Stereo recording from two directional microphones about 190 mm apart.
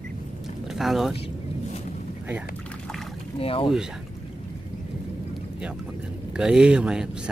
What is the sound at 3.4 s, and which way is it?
Speech, 30° left (ahead or behind).